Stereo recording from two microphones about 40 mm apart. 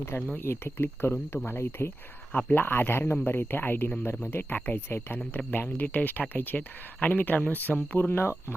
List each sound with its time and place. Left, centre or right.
0.3 s speech: left
2.5 s speech: left
3.2 s speech: left
4.0 s speech: left
7.9 s speech: left